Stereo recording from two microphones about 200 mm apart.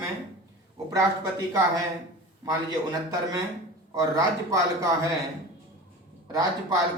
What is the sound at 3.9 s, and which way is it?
Speech, 15° right (ahead or behind).